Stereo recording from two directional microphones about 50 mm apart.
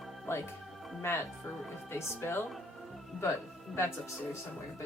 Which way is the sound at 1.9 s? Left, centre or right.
Left.